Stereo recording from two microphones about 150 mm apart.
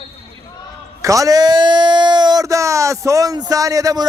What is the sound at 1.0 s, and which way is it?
A man's voice, 20° right (ahead or behind).